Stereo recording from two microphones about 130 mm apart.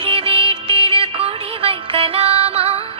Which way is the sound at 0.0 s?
50° right (ahead or behind).